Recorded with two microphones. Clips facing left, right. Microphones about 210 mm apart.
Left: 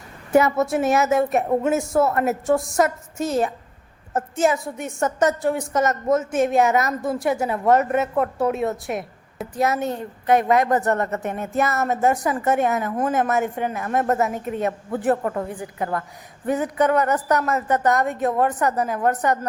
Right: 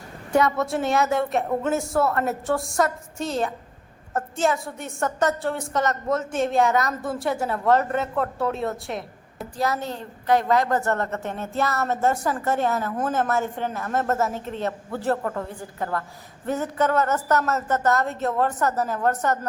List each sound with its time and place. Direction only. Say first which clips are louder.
0.3 s a woman's voice: left 3 dB; 25° left (ahead or behind)
0.5 s a woman's voice: left 3 dB; centre (ahead or behind)
2.6 s a woman's voice: left 3 dB; centre (ahead or behind)
4.9 s a woman's voice: left 3 dB; 20° left (ahead or behind)
5.4 s a woman's voice: left 4 dB; centre (ahead or behind)
5.8 s a woman's voice: left 4 dB; 20° left (ahead or behind)
6.1 s a woman's voice: left 3 dB; centre (ahead or behind)
7.4 s a woman's voice: left 2 dB; 20° left (ahead or behind)
9.6 s a woman's voice: left 4 dB; 20° left (ahead or behind)